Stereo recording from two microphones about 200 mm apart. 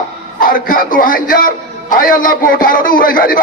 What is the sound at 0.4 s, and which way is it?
A man's voice, 45° left (ahead or behind).